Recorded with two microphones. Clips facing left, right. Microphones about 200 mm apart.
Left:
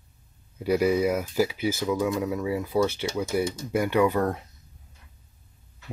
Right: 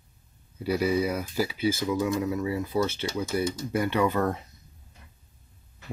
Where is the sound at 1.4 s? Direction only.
15° left (ahead or behind).